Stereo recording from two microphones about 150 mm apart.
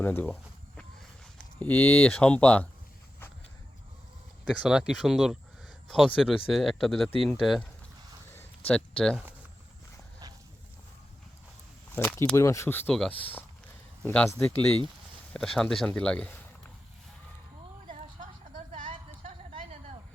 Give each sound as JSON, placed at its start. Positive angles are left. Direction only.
{"t": 0.0, "sound": "speech", "side_deg": 10}
{"t": 1.4, "sound": "speech", "side_deg": 10}
{"t": 4.5, "sound": "speech", "side_deg": -5}
{"t": 11.9, "sound": "speech", "side_deg": 15}
{"t": 12.9, "sound": "speech", "side_deg": 5}
{"t": 18.2, "sound": "a sound", "side_deg": -60}
{"t": 18.9, "sound": "a sound", "side_deg": -35}